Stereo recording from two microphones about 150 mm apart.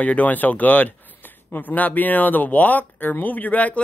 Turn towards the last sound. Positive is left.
turn(degrees=10)  # may be behind; listen again after turning